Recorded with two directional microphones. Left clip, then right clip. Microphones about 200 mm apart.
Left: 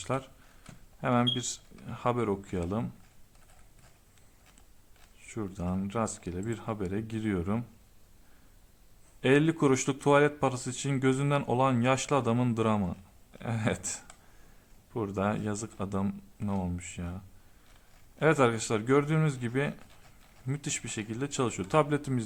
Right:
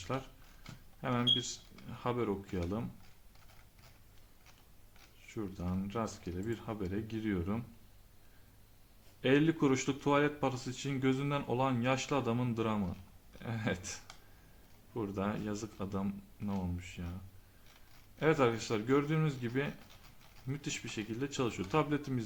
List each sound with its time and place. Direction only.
1.0 s speech: 40° left (ahead or behind)
5.2 s speech: 40° left (ahead or behind)
9.2 s speech: 40° left (ahead or behind)
18.2 s speech: 40° left (ahead or behind)